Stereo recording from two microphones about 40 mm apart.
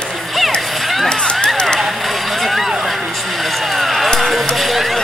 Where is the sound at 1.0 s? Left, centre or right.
Left.